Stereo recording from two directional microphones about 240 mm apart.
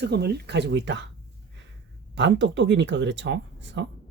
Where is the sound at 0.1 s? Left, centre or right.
Right.